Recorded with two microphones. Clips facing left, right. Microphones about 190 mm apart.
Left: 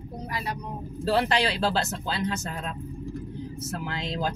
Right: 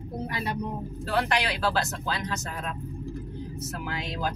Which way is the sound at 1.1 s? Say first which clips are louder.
Left 3 dB; 30° left (ahead or behind).